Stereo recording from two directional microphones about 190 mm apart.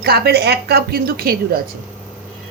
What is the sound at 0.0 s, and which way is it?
A woman's voice, 55° right (ahead or behind).